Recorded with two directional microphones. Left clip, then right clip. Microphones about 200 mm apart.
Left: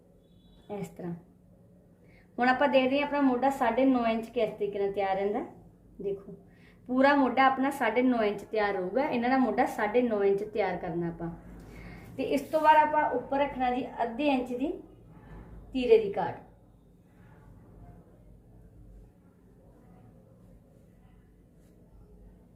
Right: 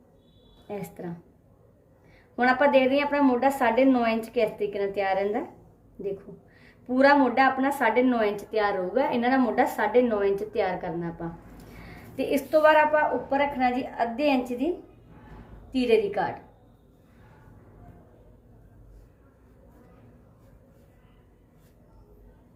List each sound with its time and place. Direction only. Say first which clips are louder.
0.7 s a woman's voice: right 3 dB; 10° right (ahead or behind)
2.3 s a woman's voice: right 4 dB; centre (ahead or behind)
6.8 s a woman's voice: right 4 dB; 5° right (ahead or behind)
12.1 s a woman's voice: right 5 dB; 20° right (ahead or behind)
15.7 s a woman's voice: right 1 dB; 30° right (ahead or behind)